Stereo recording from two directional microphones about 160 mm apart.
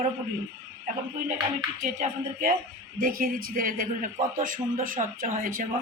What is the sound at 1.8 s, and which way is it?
Speech, 60° right (ahead or behind).